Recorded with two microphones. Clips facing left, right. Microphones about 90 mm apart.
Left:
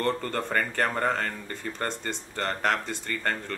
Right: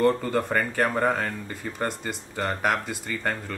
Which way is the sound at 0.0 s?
5° right (ahead or behind).